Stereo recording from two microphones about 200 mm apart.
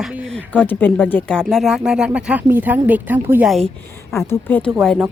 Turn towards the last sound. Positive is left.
turn(degrees=0)  # may be behind; listen again after turning